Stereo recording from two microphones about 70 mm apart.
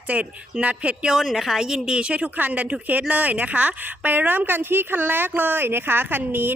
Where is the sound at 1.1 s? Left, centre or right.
Centre.